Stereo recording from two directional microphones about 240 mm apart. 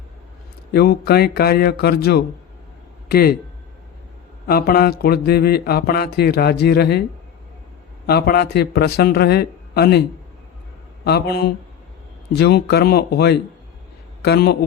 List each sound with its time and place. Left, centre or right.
0.7 s speech: left
4.4 s speech: left
8.0 s speech: left
11.0 s a man's voice: left